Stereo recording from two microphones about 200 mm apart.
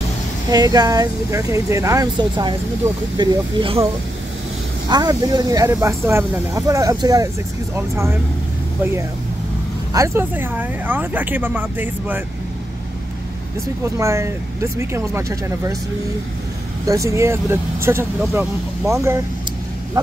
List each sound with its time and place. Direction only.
0.5 s speech: 20° right (ahead or behind)
4.8 s speech: 20° right (ahead or behind)
9.9 s speech: 15° right (ahead or behind)
13.9 s speech: 15° right (ahead or behind)
16.8 s speech: 15° right (ahead or behind)